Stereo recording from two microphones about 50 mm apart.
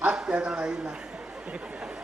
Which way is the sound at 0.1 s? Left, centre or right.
Centre.